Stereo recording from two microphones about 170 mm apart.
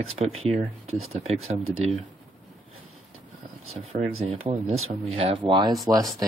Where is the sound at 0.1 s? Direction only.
35° right (ahead or behind).